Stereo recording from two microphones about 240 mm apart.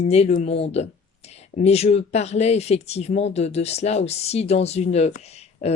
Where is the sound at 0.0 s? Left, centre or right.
Left.